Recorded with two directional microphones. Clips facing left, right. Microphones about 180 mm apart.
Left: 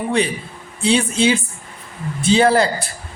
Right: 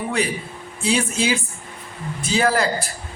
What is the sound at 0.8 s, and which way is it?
A man's voice, 30° left (ahead or behind).